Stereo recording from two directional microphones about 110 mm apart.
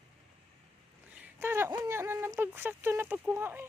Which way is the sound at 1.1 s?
15° right (ahead or behind).